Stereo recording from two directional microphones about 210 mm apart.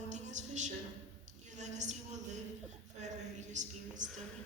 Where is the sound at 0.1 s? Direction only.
35° right (ahead or behind).